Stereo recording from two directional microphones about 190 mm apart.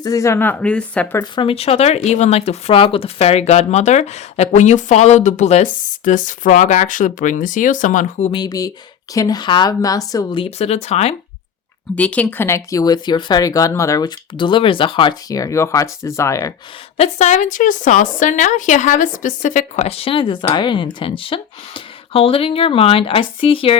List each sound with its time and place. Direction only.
0.0 s speech: 15° left (ahead or behind)
1.2 s a woman's voice: 25° left (ahead or behind); by 8.3 s 40° left (ahead or behind)
8.3 s speech: 20° left (ahead or behind)
11.9 s speech: 5° left (ahead or behind)
17.0 s a woman's voice: 40° left (ahead or behind)